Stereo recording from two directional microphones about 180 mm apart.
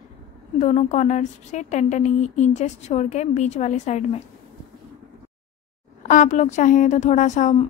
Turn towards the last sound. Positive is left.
turn(degrees=40)  # may be behind; listen again after turning